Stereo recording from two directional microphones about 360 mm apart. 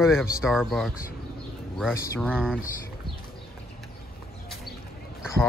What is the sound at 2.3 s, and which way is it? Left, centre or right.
Speech, centre.